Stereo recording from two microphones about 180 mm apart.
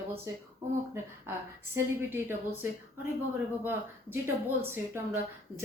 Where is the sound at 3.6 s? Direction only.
10° right (ahead or behind).